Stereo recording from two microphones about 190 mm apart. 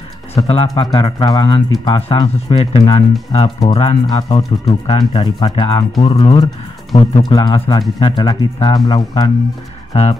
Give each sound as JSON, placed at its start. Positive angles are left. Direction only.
{"t": 0.4, "sound": "speech", "side_deg": 30}